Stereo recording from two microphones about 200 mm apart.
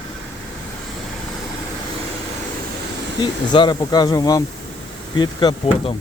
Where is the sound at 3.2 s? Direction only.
20° left (ahead or behind).